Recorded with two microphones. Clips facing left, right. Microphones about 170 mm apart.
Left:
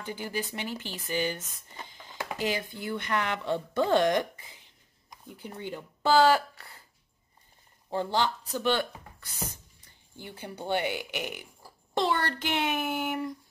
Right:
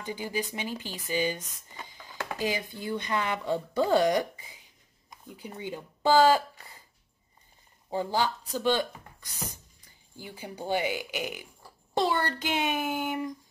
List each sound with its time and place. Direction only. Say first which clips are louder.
0.0 s speech: right 1 dB; 15° right (ahead or behind)
1.7 s a sound: even; 15° right (ahead or behind)
2.1 s dishes: even; 15° left (ahead or behind)
2.4 s speech: even; 15° right (ahead or behind)
7.9 s speech: even; 10° right (ahead or behind)
12.8 s speech: even; centre (ahead or behind)